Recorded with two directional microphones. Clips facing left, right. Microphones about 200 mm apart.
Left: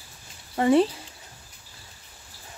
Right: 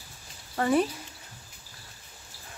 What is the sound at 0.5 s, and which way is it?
Speech, 25° left (ahead or behind).